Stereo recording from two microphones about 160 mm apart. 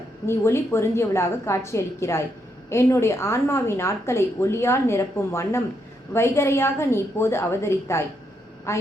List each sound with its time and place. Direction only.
0.3 s a woman's voice: 15° left (ahead or behind)